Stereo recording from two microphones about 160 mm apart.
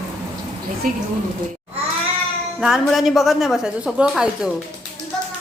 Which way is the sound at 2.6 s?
Centre (ahead or behind).